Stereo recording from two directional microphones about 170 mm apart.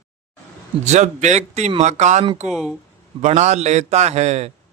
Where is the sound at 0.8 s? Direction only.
45° right (ahead or behind).